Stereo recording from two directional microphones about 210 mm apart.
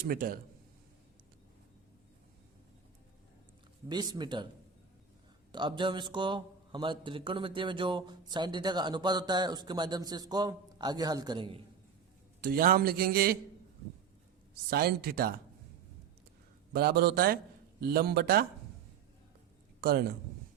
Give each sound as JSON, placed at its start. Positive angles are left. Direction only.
{"t": 0.1, "sound": "a man's voice", "side_deg": -45}
{"t": 3.8, "sound": "a man's voice", "side_deg": -20}
{"t": 5.5, "sound": "a man's voice", "side_deg": -20}
{"t": 12.4, "sound": "a man's voice", "side_deg": -45}
{"t": 14.7, "sound": "a man's voice", "side_deg": -45}
{"t": 16.7, "sound": "a man's voice", "side_deg": -50}